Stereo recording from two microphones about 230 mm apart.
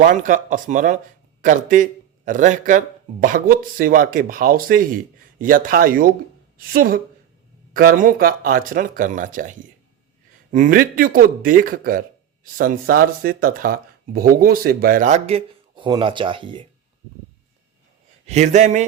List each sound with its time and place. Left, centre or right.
0.0 s speech: right
18.3 s speech: right